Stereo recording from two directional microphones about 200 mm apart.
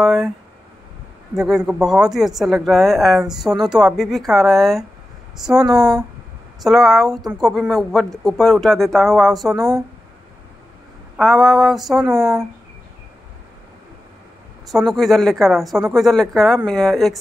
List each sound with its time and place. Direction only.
0.0 s speech: centre (ahead or behind)
1.3 s speech: centre (ahead or behind)
5.8 s speech: 20° right (ahead or behind)
6.6 s speech: centre (ahead or behind)
11.1 s speech: centre (ahead or behind)
14.7 s speech: centre (ahead or behind)